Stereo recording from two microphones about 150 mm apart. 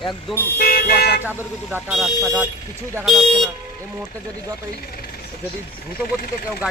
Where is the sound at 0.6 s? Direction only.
90° left.